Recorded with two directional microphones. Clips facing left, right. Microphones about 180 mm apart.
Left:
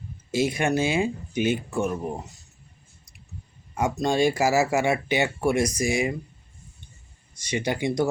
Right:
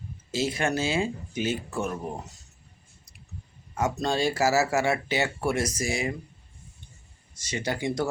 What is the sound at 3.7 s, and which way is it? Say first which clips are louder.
Speech: left 3 dB; 15° left (ahead or behind).